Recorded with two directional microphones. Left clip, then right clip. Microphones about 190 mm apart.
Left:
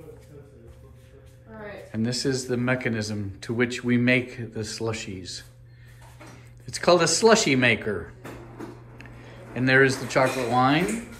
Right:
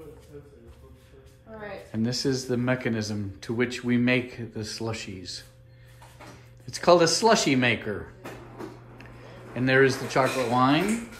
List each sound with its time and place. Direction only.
1.9 s speech: 10° right (ahead or behind)
6.6 s speech: 10° right (ahead or behind)